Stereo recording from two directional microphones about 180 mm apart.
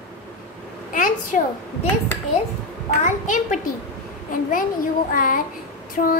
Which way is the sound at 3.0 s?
45° left (ahead or behind).